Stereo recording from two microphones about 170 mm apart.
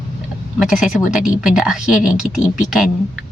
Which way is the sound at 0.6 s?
Centre (ahead or behind).